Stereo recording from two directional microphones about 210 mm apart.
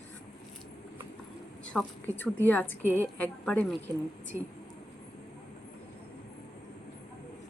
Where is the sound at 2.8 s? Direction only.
10° right (ahead or behind).